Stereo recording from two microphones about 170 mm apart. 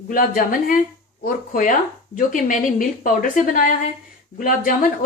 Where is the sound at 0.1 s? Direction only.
55° left (ahead or behind).